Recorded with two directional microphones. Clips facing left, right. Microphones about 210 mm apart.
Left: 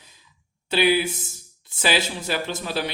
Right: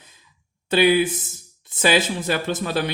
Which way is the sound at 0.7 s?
50° right (ahead or behind).